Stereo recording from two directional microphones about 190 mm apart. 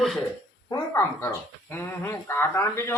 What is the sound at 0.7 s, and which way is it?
Speech, 15° left (ahead or behind).